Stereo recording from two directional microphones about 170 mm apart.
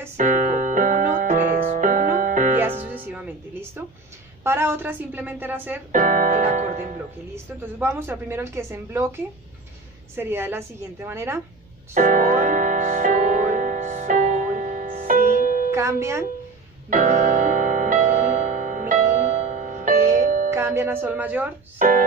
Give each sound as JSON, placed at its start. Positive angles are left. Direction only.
{"t": 0.2, "sound": "music", "side_deg": -50}
{"t": 2.9, "sound": "music", "side_deg": -10}
{"t": 4.4, "sound": "a woman's voice", "side_deg": -15}
{"t": 5.9, "sound": "speech", "side_deg": -50}
{"t": 7.8, "sound": "a woman's voice", "side_deg": -10}
{"t": 11.9, "sound": "music", "side_deg": -50}
{"t": 15.7, "sound": "music", "side_deg": -15}
{"t": 16.9, "sound": "music", "side_deg": -45}
{"t": 20.4, "sound": "speech", "side_deg": -15}
{"t": 21.7, "sound": "speech", "side_deg": -55}